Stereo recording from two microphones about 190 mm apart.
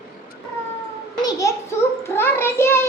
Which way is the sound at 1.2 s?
15° left (ahead or behind).